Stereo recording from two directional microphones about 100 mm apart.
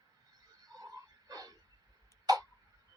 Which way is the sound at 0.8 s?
40° right (ahead or behind).